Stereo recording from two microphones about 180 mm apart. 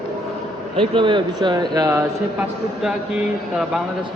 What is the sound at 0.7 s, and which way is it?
Speech, 30° right (ahead or behind).